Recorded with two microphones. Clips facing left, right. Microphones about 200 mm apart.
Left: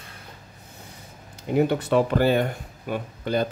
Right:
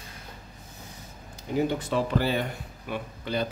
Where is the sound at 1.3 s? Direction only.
65° left (ahead or behind); by 3.4 s 45° left (ahead or behind).